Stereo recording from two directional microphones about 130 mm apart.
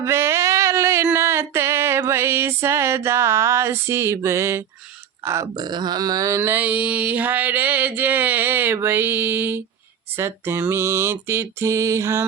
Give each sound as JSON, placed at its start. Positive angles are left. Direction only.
{"t": 0.0, "sound": "a sound", "side_deg": -20}
{"t": 1.1, "sound": "music", "side_deg": -20}
{"t": 5.2, "sound": "mantra", "side_deg": -25}